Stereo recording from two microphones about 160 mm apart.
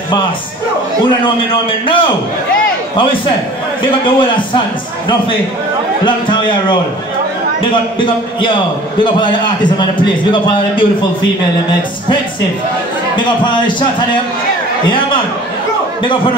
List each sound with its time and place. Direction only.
1.2 s a man's voice: 35° left (ahead or behind)
3.8 s a man's voice: 30° left (ahead or behind)
6.0 s a man's voice: 30° left (ahead or behind)
8.0 s a man's voice: 30° left (ahead or behind)
13.1 s a man's voice: 30° left (ahead or behind)